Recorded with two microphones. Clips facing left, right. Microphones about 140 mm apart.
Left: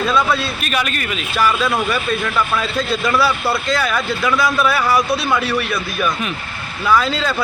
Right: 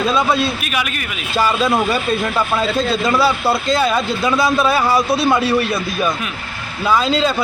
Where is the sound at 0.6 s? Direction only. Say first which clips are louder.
Left 1 dB; 5° right (ahead or behind).